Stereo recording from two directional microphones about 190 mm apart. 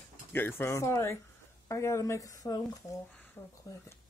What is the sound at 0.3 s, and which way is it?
Speech, 10° left (ahead or behind).